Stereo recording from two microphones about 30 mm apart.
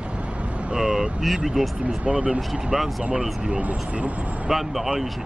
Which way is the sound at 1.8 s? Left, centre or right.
Right.